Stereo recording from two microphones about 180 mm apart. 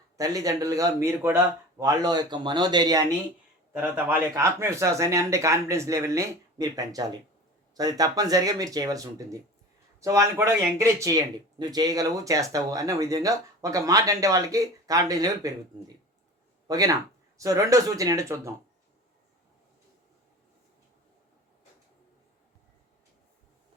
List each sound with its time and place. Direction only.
0.2 s speech: 20° right (ahead or behind)
3.7 s speech: 10° right (ahead or behind)
16.6 s speech: 20° right (ahead or behind)